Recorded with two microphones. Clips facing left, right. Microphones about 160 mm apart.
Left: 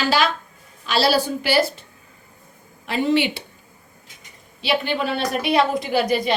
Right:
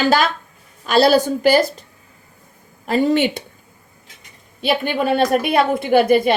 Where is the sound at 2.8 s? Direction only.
45° right (ahead or behind).